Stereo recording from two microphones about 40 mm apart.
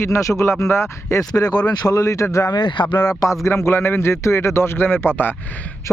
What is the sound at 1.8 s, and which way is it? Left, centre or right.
Speech, left.